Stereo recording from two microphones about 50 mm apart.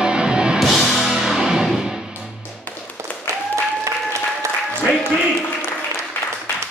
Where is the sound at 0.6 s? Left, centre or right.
Centre.